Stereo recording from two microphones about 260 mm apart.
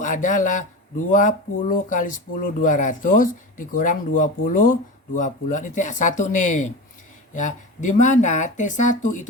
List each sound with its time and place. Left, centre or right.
0.0 s speech: left